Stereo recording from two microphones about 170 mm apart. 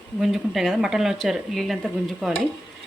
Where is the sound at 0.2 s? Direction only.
Centre (ahead or behind).